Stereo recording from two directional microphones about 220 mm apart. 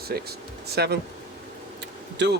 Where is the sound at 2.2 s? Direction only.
50° right (ahead or behind).